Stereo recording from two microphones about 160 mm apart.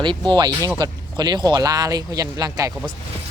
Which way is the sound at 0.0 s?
30° right (ahead or behind).